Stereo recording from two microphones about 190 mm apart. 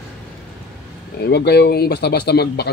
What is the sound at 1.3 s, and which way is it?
Speech, 60° left (ahead or behind).